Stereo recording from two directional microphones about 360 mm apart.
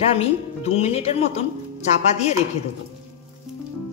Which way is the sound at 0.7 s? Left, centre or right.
Centre.